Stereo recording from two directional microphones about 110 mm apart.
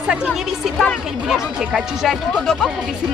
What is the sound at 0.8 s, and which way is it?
Speech, 5° left (ahead or behind).